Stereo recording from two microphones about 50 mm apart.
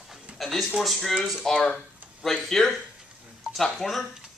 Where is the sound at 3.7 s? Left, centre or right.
Centre.